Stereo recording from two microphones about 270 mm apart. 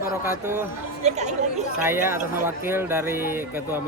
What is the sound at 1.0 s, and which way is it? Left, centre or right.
Speech, right.